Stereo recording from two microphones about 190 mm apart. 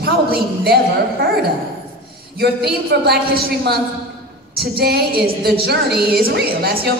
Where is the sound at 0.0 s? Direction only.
55° right (ahead or behind).